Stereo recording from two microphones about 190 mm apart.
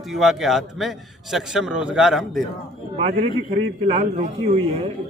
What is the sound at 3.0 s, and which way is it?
A man's voice, 35° right (ahead or behind).